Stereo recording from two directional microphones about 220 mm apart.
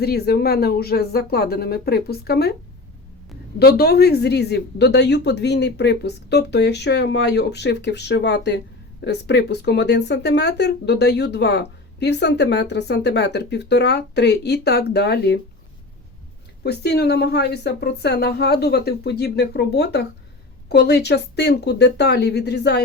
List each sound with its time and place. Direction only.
0.0 s speech: 45° left (ahead or behind)
3.6 s speech: 45° left (ahead or behind)
16.6 s speech: 45° left (ahead or behind)